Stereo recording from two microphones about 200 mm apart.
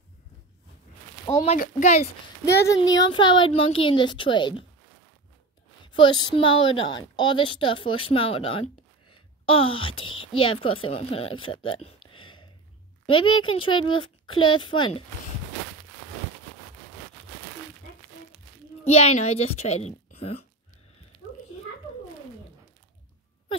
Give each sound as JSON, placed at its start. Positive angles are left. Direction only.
{"t": 1.6, "sound": "a child's voice", "side_deg": 35}
{"t": 2.7, "sound": "a woman's voice", "side_deg": 20}
{"t": 5.9, "sound": "a woman's voice", "side_deg": 25}
{"t": 12.1, "sound": "a sound", "side_deg": 25}
{"t": 13.0, "sound": "a woman's voice", "side_deg": 25}
{"t": 18.9, "sound": "a child's voice", "side_deg": 30}